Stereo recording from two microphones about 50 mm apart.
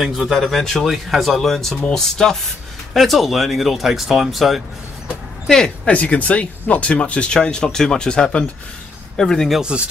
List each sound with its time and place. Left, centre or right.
0.0 s speech: centre
5.9 s speech: left; by 9.5 s centre
9.6 s speech: centre